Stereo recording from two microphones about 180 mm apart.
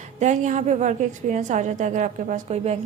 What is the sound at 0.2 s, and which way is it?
A woman's voice, 40° right (ahead or behind).